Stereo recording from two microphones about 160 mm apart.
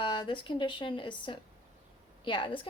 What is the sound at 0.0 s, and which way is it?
Speech, 30° left (ahead or behind).